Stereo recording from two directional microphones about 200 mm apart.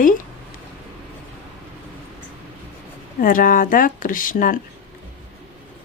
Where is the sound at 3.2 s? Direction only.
45° left (ahead or behind).